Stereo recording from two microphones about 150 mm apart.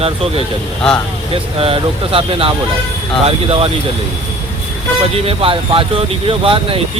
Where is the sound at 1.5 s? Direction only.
40° right (ahead or behind).